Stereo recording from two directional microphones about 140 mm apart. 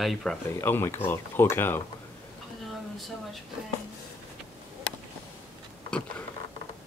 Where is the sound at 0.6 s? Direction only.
15° left (ahead or behind).